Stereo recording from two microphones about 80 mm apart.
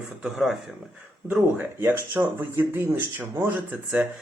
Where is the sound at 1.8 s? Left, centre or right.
Right.